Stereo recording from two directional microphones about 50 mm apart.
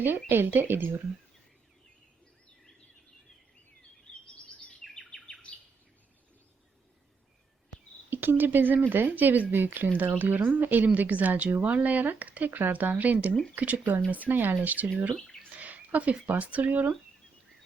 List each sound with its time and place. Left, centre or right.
0.0 s speech: right
4.4 s bird vocalization: left
8.1 s speech: right
15.5 s a sound: right
16.2 s speech: right